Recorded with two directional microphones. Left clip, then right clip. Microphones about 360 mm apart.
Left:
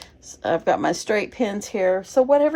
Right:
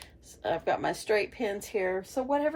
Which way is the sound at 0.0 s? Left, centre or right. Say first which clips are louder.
Left 7 dB; left.